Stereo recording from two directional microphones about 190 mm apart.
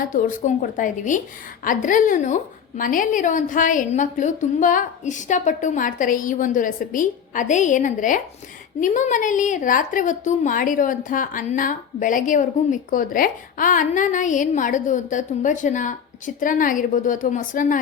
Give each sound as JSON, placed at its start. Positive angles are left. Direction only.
{"t": 0.1, "sound": "a woman's voice", "side_deg": 45}